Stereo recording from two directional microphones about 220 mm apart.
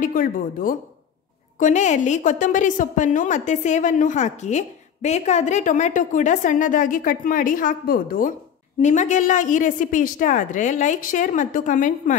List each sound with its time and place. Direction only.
0.0 s a woman's voice: 40° left (ahead or behind)